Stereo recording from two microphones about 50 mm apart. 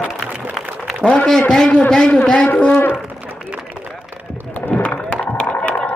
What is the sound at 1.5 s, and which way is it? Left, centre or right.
A man's voice, centre.